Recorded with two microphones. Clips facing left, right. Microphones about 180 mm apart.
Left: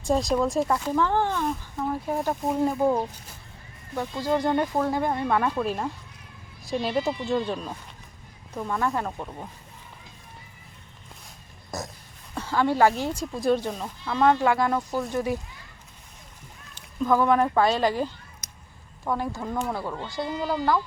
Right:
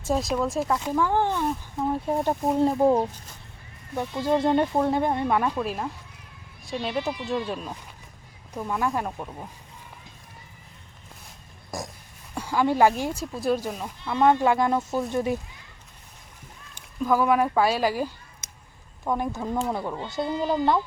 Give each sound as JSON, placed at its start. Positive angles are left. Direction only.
{"t": 0.0, "sound": "speech", "side_deg": 0}
{"t": 1.9, "sound": "speech", "side_deg": -25}
{"t": 3.9, "sound": "speech", "side_deg": -15}
{"t": 5.5, "sound": "speech", "side_deg": 0}
{"t": 11.7, "sound": "a woman's voice", "side_deg": -10}
{"t": 13.1, "sound": "speech", "side_deg": -5}
{"t": 17.0, "sound": "speech", "side_deg": -10}